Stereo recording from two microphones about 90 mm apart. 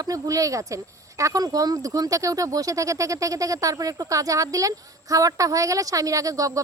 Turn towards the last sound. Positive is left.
turn(degrees=-40)  # may be behind; listen again after turning